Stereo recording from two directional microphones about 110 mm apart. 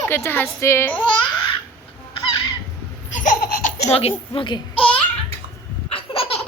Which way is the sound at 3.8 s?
65° left (ahead or behind).